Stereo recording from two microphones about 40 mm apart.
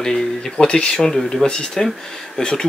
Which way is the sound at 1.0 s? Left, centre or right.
Centre.